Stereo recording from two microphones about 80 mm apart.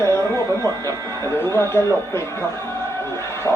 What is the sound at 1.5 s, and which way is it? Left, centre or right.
Speech, left.